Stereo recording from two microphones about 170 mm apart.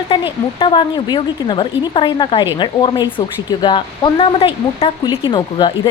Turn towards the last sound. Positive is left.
turn(degrees=25)  # may be behind; listen again after turning